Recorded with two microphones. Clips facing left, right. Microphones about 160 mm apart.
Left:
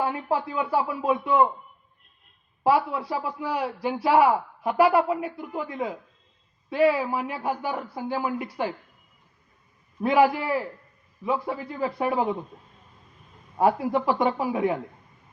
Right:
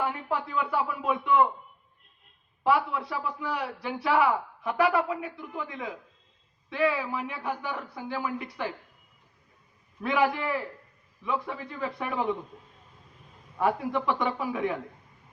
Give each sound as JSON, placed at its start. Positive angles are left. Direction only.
{"t": 0.0, "sound": "a man's voice", "side_deg": 35}
{"t": 2.6, "sound": "a man's voice", "side_deg": 35}
{"t": 10.0, "sound": "a man's voice", "side_deg": 35}
{"t": 13.6, "sound": "a man's voice", "side_deg": 35}